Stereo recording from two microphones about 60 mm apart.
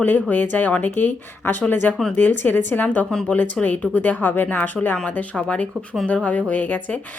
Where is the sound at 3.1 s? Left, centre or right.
Centre.